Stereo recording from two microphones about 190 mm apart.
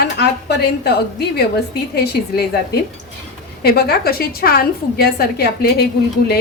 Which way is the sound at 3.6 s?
55° left (ahead or behind).